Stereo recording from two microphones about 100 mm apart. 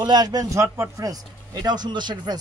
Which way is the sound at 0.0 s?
40° right (ahead or behind).